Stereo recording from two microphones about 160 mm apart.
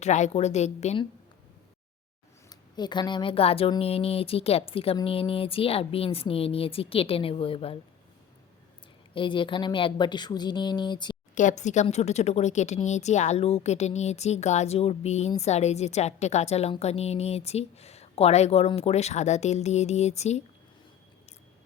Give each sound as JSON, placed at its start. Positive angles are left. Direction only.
{"t": 0.0, "sound": "a woman's voice", "side_deg": 45}
{"t": 2.5, "sound": "a woman's voice", "side_deg": 25}
{"t": 9.1, "sound": "a woman's voice", "side_deg": 30}
{"t": 11.3, "sound": "a woman's voice", "side_deg": 50}